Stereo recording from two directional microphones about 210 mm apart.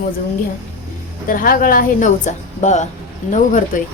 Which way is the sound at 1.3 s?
40° left (ahead or behind).